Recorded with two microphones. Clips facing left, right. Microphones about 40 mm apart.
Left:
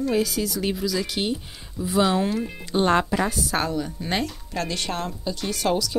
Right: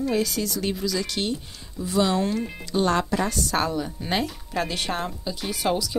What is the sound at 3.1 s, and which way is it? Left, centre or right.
Speech, centre.